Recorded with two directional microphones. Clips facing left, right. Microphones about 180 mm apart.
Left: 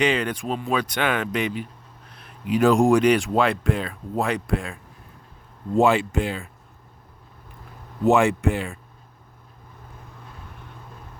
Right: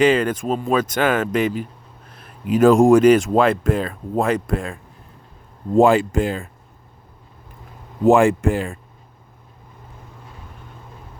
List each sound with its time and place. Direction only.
0.0 s speech: 45° right (ahead or behind)
5.8 s speech: 45° right (ahead or behind)
8.1 s speech: 45° right (ahead or behind)